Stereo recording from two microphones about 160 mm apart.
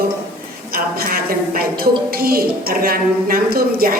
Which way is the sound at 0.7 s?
70° right (ahead or behind).